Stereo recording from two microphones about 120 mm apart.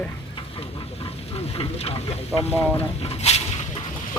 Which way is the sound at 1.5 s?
50° left (ahead or behind).